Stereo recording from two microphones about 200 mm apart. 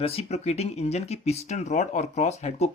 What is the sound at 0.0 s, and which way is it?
Speech, 30° left (ahead or behind).